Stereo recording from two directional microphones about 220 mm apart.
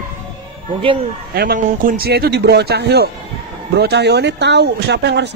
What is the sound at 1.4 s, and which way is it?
Speech, 40° right (ahead or behind).